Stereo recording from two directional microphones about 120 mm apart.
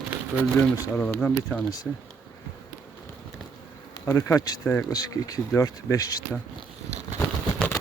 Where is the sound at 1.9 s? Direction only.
5° left (ahead or behind).